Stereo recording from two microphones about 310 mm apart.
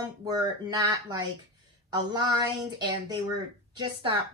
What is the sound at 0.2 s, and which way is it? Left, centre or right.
Speech, centre.